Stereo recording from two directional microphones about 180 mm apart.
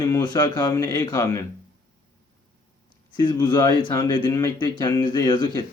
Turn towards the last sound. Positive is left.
turn(degrees=20)  # may be behind; listen again after turning